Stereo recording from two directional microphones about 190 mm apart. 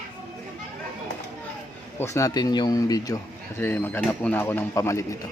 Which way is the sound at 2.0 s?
15° left (ahead or behind).